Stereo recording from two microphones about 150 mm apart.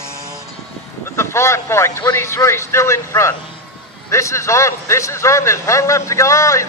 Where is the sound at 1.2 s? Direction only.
15° left (ahead or behind).